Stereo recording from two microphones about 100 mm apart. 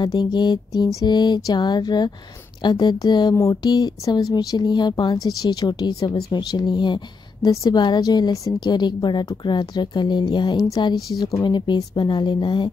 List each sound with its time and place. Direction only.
0.0 s a woman's voice: 45° left (ahead or behind)
11.5 s a woman's voice: 50° left (ahead or behind)